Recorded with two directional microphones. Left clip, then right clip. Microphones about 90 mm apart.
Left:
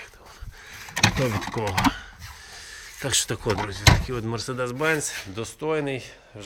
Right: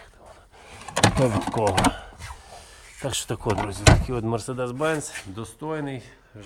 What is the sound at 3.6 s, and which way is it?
Speech, 80° right.